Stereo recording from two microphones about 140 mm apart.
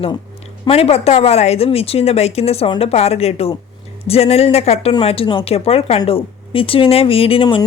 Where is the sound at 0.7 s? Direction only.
45° left (ahead or behind).